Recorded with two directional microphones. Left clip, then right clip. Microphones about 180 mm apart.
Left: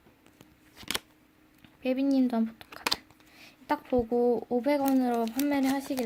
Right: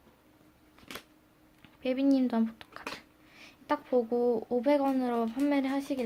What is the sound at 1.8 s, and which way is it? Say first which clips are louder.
A child's voice: left 1 dB; 25° left (ahead or behind).